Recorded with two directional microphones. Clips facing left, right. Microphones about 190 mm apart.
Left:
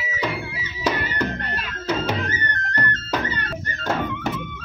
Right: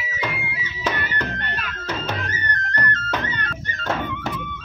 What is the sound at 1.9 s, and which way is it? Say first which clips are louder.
Music: left 5 dB; 10° left (ahead or behind).